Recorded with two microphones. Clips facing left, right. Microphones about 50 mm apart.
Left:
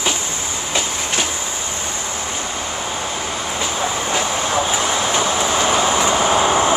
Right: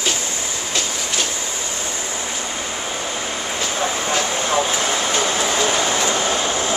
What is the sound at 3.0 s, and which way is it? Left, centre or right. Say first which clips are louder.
Vehicle: left 1 dB; centre.